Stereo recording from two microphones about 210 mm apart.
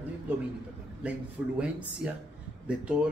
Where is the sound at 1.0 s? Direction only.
5° right (ahead or behind).